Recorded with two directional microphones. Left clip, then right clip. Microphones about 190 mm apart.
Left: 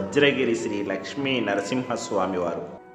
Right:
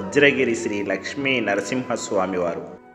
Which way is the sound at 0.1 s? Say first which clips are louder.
Right 4 dB; 15° right (ahead or behind).